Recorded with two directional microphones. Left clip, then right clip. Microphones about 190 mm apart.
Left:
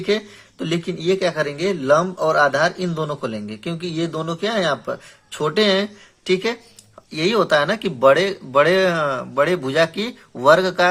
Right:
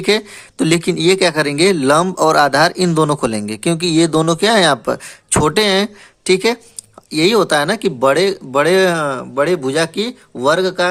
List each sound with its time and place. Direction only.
0.0 s a man's voice: 40° right (ahead or behind); by 10.8 s 20° right (ahead or behind)